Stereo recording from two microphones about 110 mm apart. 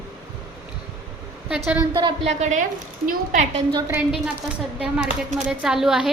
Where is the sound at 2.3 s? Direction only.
90° right.